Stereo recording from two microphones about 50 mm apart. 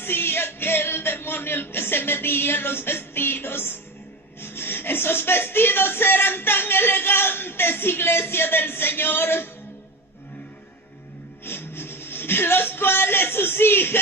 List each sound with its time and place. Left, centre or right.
0.0 s music: left
11.4 s speech: left